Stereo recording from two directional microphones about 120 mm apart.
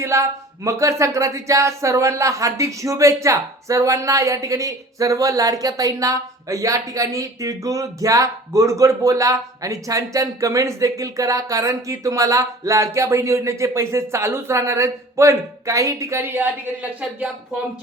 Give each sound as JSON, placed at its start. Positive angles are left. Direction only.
{"t": 0.0, "sound": "speech", "side_deg": -25}